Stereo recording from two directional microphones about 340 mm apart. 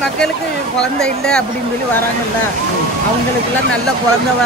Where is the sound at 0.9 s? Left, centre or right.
Centre.